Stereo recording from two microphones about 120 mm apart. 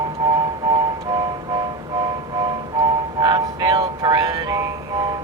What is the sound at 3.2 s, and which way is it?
Music, 35° right (ahead or behind).